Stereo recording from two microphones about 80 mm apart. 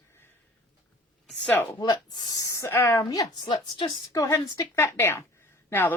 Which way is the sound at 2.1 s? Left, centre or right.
Left.